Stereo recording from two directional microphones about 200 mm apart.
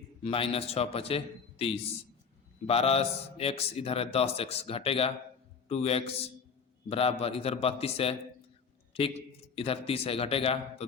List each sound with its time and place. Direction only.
0.2 s a man's voice: 30° left (ahead or behind)